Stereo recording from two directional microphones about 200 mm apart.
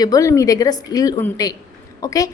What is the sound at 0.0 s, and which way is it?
A woman's voice, 15° left (ahead or behind).